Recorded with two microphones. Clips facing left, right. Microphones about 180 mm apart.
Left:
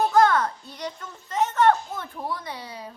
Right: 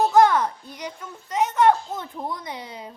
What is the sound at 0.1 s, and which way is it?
A woman's voice, 10° right (ahead or behind).